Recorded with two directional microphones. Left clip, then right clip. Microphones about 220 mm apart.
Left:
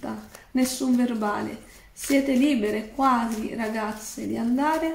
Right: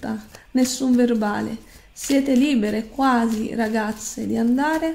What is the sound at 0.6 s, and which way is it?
A woman's voice, 50° right (ahead or behind).